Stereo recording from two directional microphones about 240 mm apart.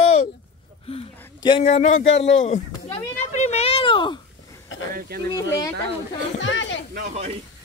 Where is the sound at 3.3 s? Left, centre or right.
Left.